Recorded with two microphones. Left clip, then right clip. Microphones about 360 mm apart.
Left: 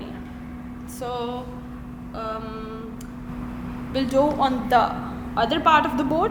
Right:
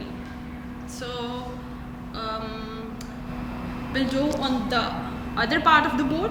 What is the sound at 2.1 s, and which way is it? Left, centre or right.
Vehicle, centre.